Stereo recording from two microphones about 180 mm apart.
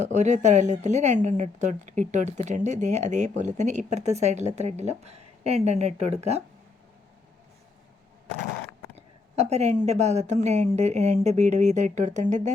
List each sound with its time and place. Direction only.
0.0 s speech: 40° right (ahead or behind)
9.0 s a sound: 35° right (ahead or behind)
9.8 s speech: 40° right (ahead or behind)